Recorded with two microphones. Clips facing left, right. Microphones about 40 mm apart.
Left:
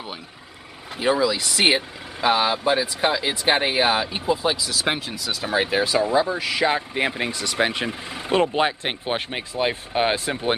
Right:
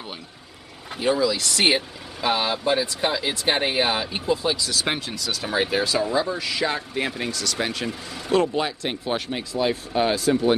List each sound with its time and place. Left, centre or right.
0.9 s speech: centre; by 10.5 s left